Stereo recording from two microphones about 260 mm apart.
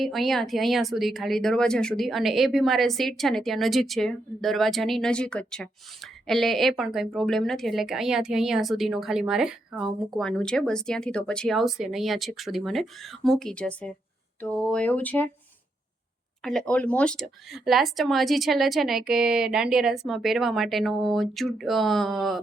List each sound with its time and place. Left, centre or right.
0.0 s speech: centre
16.4 s speech: centre